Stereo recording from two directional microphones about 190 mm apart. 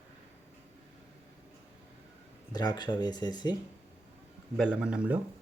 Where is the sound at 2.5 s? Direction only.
20° left (ahead or behind).